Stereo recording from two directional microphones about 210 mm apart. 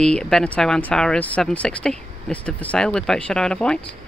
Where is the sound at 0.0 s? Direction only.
5° left (ahead or behind).